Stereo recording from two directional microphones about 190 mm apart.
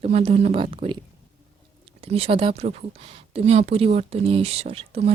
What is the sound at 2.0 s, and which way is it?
Speech, 30° right (ahead or behind).